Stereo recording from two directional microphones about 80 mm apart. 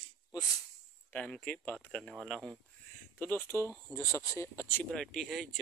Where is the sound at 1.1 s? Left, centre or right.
Centre.